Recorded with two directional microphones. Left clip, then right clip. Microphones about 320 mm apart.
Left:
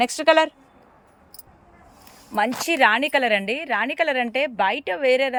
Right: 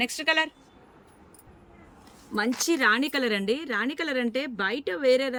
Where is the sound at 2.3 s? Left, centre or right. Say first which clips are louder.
Left 5 dB; centre.